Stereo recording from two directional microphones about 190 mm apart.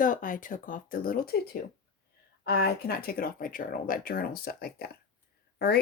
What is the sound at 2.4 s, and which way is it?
Speech, 55° left (ahead or behind).